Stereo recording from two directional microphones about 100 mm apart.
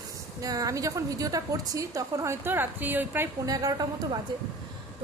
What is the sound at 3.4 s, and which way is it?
Speech, 40° right (ahead or behind).